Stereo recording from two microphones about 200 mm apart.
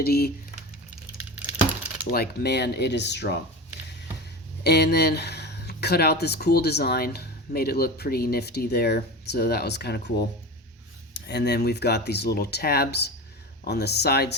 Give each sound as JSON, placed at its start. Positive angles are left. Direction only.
{"t": 0.0, "sound": "speech", "side_deg": 50}
{"t": 2.0, "sound": "speech", "side_deg": 50}
{"t": 4.6, "sound": "speech", "side_deg": 55}